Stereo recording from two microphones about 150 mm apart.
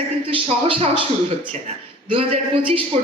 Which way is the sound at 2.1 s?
35° right (ahead or behind).